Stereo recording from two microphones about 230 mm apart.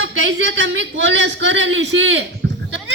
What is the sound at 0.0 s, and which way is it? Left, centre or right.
A man's voice, right.